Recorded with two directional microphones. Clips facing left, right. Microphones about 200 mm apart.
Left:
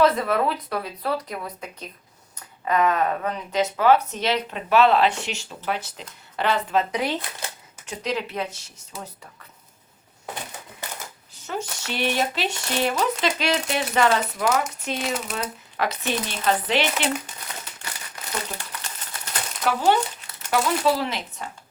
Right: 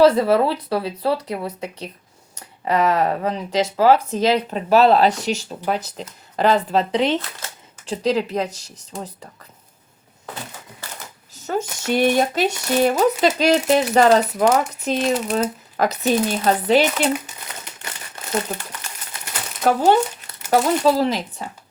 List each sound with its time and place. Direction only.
0.0 s speech: 30° right (ahead or behind)
7.2 s speech: 15° left (ahead or behind)
7.9 s speech: 35° right (ahead or behind)
11.4 s speech: 45° right (ahead or behind)
19.6 s speech: 40° right (ahead or behind)